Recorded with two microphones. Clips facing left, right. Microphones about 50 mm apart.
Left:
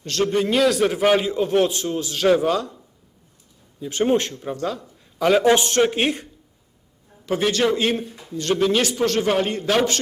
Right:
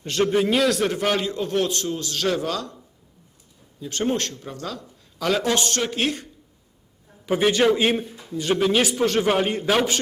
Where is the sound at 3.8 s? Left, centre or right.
Centre.